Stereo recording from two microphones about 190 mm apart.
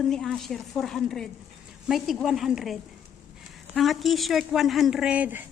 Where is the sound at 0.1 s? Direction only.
Centre (ahead or behind).